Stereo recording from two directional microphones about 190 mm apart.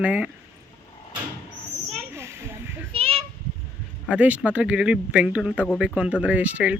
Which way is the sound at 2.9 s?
30° right (ahead or behind).